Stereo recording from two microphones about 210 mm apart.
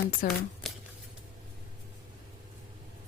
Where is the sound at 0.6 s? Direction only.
Centre (ahead or behind).